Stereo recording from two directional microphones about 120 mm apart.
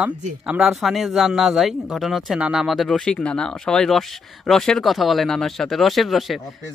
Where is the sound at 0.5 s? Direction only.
5° right (ahead or behind).